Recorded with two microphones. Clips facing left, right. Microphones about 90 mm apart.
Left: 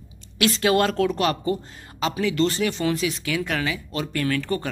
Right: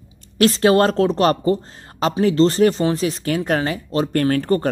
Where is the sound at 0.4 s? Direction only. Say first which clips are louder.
Right 6 dB; 35° right (ahead or behind).